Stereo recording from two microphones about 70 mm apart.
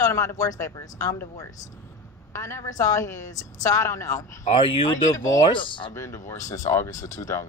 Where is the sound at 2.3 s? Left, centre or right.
Left.